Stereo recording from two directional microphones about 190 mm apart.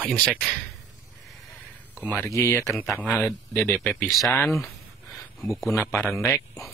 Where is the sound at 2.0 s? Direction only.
10° left (ahead or behind).